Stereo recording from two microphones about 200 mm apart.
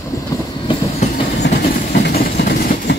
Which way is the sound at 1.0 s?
35° left (ahead or behind).